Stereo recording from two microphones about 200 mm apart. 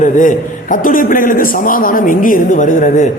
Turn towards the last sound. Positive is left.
turn(degrees=40)  # may be behind; listen again after turning